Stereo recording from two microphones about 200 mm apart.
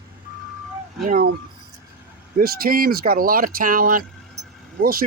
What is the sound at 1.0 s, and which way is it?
Speech, 45° right (ahead or behind).